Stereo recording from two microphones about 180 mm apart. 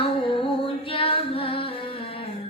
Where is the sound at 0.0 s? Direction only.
30° left (ahead or behind).